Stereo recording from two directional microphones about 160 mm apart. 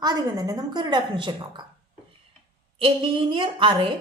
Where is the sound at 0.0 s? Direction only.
25° right (ahead or behind).